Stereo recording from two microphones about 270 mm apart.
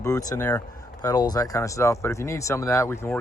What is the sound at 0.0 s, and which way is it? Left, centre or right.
Speech, centre.